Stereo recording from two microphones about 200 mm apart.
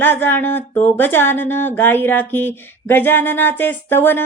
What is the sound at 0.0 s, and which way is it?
Speech, 10° left (ahead or behind).